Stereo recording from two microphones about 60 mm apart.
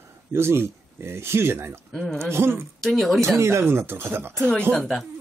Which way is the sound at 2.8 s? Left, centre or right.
Centre.